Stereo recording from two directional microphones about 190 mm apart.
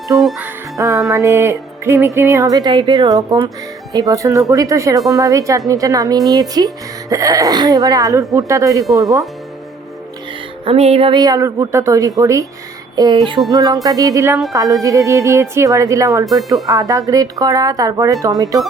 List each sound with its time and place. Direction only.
0.2 s music: 5° right (ahead or behind)
1.1 s speech: 15° right (ahead or behind)
10.7 s speech: 35° right (ahead or behind); by 12.5 s 15° right (ahead or behind)
13.0 s music: 25° right (ahead or behind)
13.5 s speech: 20° right (ahead or behind)